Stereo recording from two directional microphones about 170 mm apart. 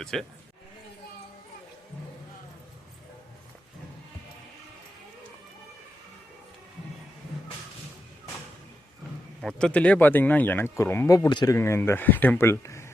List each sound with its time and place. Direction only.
0.0 s speech: centre (ahead or behind)
9.4 s speech: 5° left (ahead or behind)